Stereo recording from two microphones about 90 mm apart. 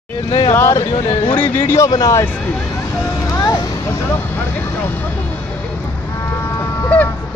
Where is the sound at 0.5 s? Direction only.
30° left (ahead or behind).